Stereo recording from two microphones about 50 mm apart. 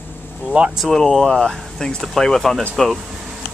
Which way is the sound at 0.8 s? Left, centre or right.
Centre.